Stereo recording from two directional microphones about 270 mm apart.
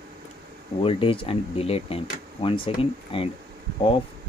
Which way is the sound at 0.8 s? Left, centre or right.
Centre.